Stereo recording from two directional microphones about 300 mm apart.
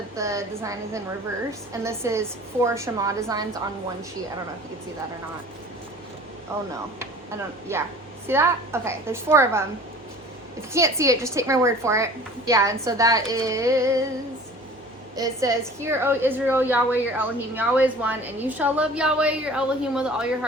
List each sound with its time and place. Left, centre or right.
0.2 s a woman's voice: centre
6.5 s a woman's voice: centre
7.7 s a woman's voice: centre
10.7 s a woman's voice: centre
15.1 s a woman's voice: centre